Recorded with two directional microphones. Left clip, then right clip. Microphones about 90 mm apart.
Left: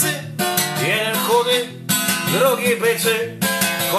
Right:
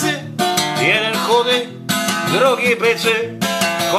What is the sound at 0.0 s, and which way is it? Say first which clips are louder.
Music: right 3 dB; 40° right (ahead or behind).